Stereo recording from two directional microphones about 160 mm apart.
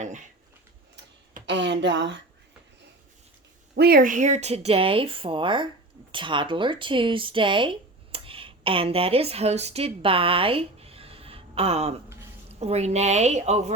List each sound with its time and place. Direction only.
1.5 s speech: 90° right
3.8 s a woman's voice: 70° right (ahead or behind); by 13.7 s 45° right (ahead or behind)